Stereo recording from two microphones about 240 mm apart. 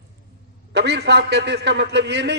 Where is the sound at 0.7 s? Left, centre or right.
Right.